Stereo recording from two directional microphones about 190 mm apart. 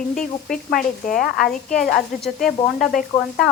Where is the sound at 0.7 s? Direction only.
45° left (ahead or behind).